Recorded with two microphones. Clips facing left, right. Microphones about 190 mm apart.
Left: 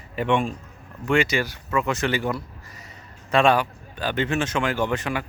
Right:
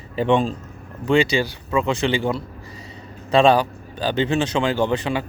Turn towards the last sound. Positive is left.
turn(degrees=-30)  # may be behind; listen again after turning